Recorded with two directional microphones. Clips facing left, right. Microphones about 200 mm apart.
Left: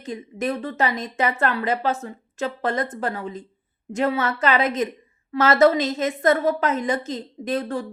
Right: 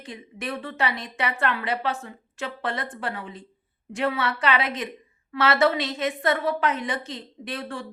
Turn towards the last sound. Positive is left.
turn(degrees=40)  # may be behind; listen again after turning